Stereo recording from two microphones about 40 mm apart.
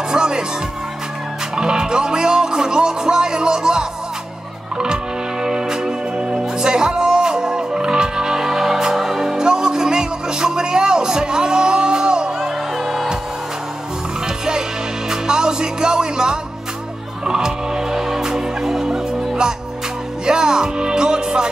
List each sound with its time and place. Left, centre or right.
0.1 s music: centre
1.5 s music: centre
5.4 s music: centre
12.4 s music: centre
14.2 s music: centre